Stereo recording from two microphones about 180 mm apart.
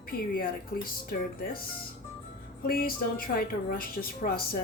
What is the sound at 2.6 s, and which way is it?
A woman's voice, 55° left (ahead or behind).